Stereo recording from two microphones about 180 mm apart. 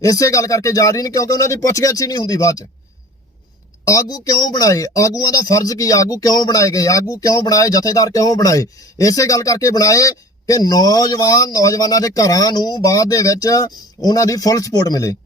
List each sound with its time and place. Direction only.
0.0 s a man's voice: 20° left (ahead or behind)
3.8 s a man's voice: 20° left (ahead or behind)